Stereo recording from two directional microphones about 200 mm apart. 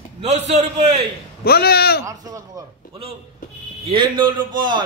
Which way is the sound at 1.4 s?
50° left (ahead or behind).